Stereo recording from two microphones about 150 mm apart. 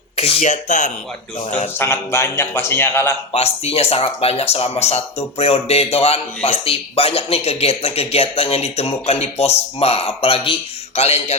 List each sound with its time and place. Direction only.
0.2 s speech: 40° left (ahead or behind)
1.8 s a man's voice: 15° left (ahead or behind)
3.3 s speech: 45° left (ahead or behind)